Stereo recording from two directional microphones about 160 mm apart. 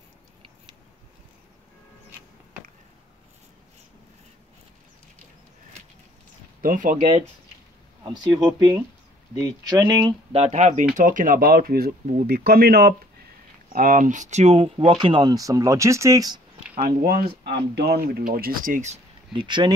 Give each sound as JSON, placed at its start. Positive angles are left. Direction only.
{"t": 6.6, "sound": "speech", "side_deg": -55}
{"t": 8.0, "sound": "speech", "side_deg": -25}
{"t": 10.5, "sound": "speech", "side_deg": -50}
{"t": 13.7, "sound": "speech", "side_deg": -55}
{"t": 16.8, "sound": "speech", "side_deg": -75}
{"t": 19.3, "sound": "speech", "side_deg": -30}